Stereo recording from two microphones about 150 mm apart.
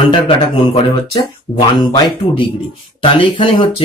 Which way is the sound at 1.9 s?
30° left (ahead or behind).